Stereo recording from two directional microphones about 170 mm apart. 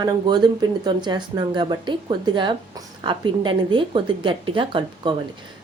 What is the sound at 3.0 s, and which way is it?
A woman's voice, 30° right (ahead or behind).